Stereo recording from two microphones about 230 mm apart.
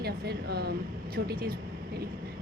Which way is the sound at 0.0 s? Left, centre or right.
Right.